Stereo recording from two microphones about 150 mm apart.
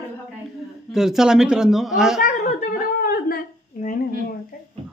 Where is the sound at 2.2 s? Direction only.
60° left (ahead or behind); by 4.3 s 75° left (ahead or behind).